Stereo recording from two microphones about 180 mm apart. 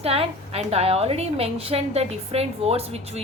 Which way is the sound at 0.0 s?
35° right (ahead or behind).